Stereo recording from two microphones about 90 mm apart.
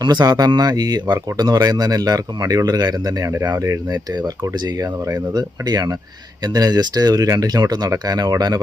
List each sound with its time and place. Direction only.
0.0 s speech: 50° right (ahead or behind)
4.1 s speech: 50° right (ahead or behind)